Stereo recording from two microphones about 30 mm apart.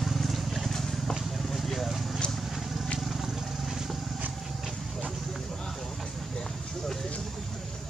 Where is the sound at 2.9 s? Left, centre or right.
Centre.